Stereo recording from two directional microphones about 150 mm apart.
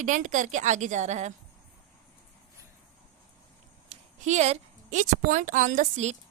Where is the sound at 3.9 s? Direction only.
50° right (ahead or behind).